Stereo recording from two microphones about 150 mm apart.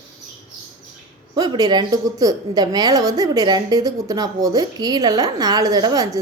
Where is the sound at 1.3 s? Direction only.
25° right (ahead or behind).